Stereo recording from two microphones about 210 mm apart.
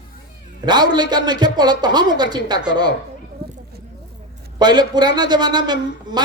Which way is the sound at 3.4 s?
50° right (ahead or behind).